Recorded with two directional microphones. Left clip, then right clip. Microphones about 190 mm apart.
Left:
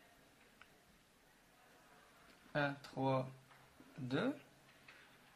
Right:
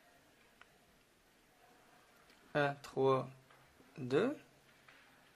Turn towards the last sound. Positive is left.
turn(degrees=-40)  # may be behind; listen again after turning